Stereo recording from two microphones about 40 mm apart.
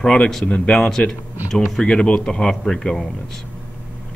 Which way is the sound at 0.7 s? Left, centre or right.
Centre.